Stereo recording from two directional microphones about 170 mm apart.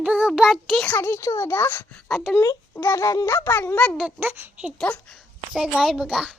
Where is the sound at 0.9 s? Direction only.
15° left (ahead or behind).